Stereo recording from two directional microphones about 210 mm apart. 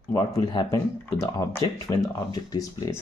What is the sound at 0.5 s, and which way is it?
Speech, 20° left (ahead or behind).